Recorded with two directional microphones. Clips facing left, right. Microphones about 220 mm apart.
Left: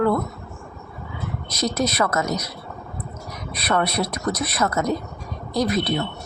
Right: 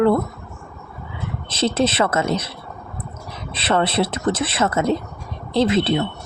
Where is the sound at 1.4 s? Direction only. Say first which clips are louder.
Right 4 dB; 30° right (ahead or behind).